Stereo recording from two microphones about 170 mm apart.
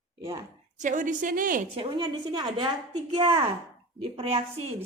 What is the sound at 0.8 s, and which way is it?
Speech, 50° right (ahead or behind).